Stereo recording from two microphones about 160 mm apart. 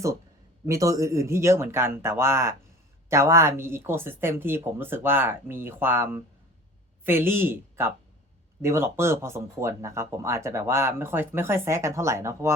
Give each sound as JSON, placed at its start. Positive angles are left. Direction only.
{"t": 0.6, "sound": "speech", "side_deg": -20}